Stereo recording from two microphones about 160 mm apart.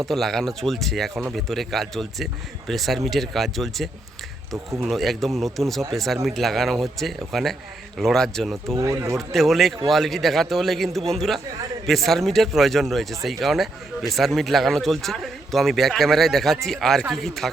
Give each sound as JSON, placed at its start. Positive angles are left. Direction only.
{"t": 0.1, "sound": "a man's voice", "side_deg": 0}
{"t": 8.6, "sound": "speech", "side_deg": -20}
{"t": 9.1, "sound": "a man's voice", "side_deg": 0}